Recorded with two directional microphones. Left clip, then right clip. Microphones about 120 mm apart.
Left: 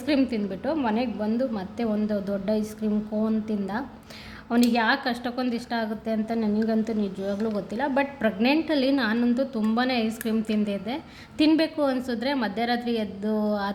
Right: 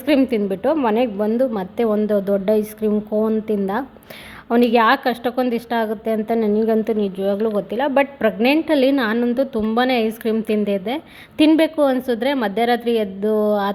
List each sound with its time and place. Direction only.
0.0 s a woman's voice: 55° right (ahead or behind)